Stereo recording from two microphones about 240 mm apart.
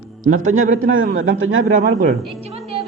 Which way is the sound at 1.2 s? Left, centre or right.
Right.